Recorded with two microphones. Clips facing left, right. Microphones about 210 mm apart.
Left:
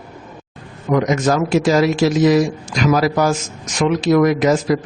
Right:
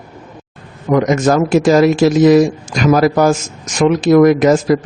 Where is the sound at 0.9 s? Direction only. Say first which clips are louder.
Right 4 dB; 50° right (ahead or behind).